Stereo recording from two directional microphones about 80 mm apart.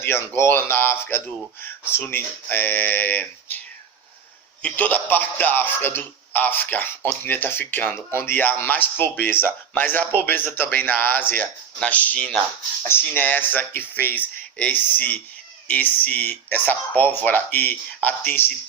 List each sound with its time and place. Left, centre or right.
0.0 s a man's voice: left
4.6 s a man's voice: left